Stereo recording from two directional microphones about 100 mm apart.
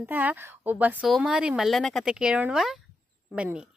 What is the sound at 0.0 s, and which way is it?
A woman's voice, 15° right (ahead or behind).